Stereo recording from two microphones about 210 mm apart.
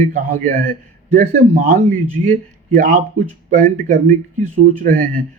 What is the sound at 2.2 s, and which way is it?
A man's voice, 40° right (ahead or behind).